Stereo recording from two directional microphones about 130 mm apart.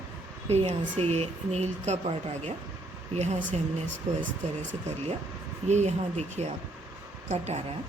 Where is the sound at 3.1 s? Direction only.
60° right (ahead or behind).